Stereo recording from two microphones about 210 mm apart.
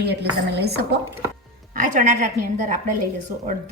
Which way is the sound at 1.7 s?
40° right (ahead or behind).